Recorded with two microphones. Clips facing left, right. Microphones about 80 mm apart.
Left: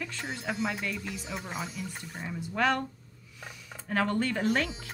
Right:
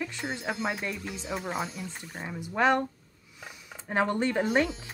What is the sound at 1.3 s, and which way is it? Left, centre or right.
Speech, right.